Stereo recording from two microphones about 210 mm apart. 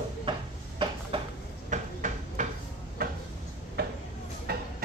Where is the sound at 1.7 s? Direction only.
35° right (ahead or behind).